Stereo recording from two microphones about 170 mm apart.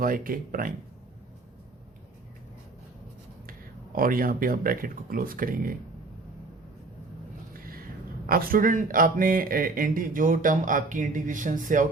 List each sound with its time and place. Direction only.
0.0 s speech: 55° right (ahead or behind)
3.9 s speech: 55° right (ahead or behind)
8.3 s a man's voice: 60° right (ahead or behind)